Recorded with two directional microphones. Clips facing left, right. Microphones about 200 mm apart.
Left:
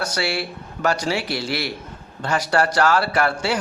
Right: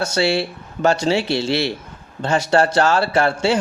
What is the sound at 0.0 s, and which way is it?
A man's voice, 25° right (ahead or behind).